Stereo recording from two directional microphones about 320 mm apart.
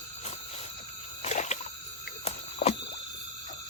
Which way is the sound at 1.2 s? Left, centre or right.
Left.